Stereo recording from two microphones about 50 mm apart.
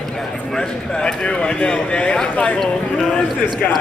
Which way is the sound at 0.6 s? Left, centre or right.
Centre.